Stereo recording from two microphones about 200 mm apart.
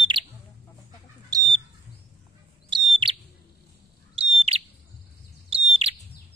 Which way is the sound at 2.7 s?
25° right (ahead or behind).